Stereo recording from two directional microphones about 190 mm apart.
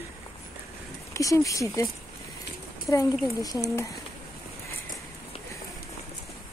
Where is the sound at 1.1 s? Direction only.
15° left (ahead or behind).